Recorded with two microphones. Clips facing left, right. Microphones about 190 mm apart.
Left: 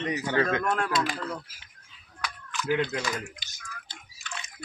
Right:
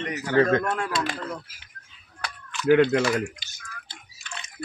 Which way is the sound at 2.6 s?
65° right (ahead or behind).